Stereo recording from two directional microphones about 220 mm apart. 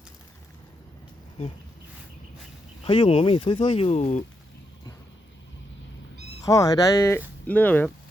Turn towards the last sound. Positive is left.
turn(degrees=5)  # may be behind; listen again after turning